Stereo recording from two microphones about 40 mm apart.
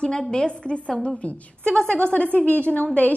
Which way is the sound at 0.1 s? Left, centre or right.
Centre.